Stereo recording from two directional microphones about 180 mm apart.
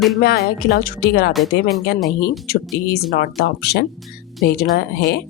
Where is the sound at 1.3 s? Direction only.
Centre (ahead or behind).